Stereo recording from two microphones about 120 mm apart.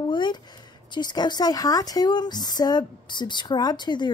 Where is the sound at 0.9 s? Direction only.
35° left (ahead or behind).